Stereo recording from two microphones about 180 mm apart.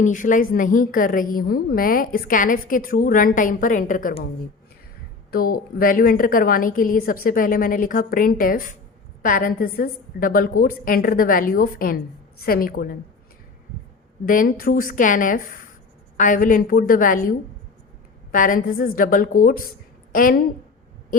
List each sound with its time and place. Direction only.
0.0 s a woman's voice: 45° left (ahead or behind)
5.3 s a woman's voice: 50° left (ahead or behind)
14.3 s a woman's voice: 50° left (ahead or behind)